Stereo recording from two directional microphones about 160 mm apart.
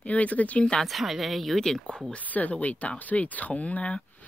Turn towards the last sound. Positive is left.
turn(degrees=10)  # may be behind; listen again after turning